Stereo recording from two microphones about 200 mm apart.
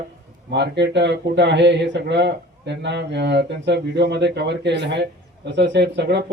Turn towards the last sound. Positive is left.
turn(degrees=-60)  # may be behind; listen again after turning